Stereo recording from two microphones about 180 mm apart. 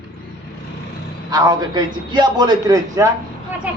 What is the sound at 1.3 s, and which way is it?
A man's voice, 20° right (ahead or behind).